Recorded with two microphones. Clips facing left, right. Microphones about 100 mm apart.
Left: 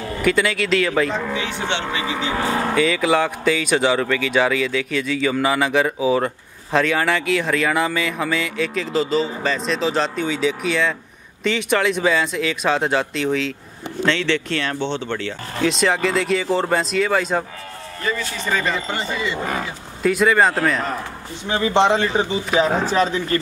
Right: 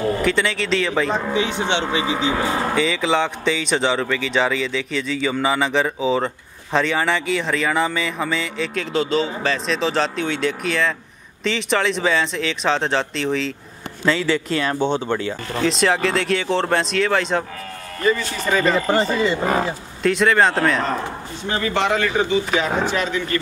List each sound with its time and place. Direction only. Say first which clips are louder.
0.2 s speech: left 1 dB; 5° left (ahead or behind)
1.1 s speech: right 3 dB; 20° right (ahead or behind)
2.8 s speech: left 3 dB; 5° left (ahead or behind); by 15.3 s 15° right (ahead or behind)
15.6 s speech: even; centre (ahead or behind)
18.7 s speech: right 6 dB; 40° right (ahead or behind)
20.0 s speech: even; 5° left (ahead or behind)
21.5 s speech: left 4 dB; 20° left (ahead or behind)